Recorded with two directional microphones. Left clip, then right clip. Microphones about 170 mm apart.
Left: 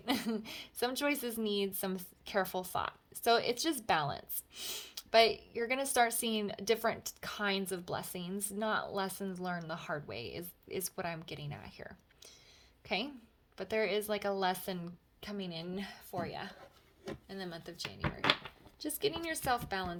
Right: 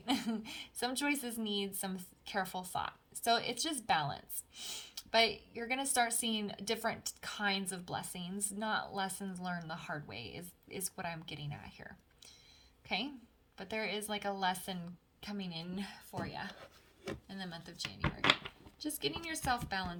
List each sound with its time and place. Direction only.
0.0 s a woman's voice: 40° left (ahead or behind)
13.6 s a woman's voice: 40° left (ahead or behind)